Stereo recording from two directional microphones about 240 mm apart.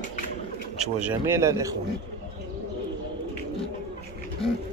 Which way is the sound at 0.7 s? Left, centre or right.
Centre.